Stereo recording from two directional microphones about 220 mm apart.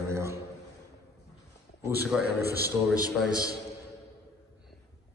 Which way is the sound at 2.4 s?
45° right (ahead or behind).